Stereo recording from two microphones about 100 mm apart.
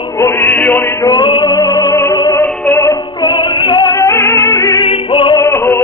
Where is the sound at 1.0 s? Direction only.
50° left (ahead or behind).